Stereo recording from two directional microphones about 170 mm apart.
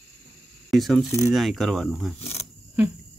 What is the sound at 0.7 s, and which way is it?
A woman's voice, centre (ahead or behind).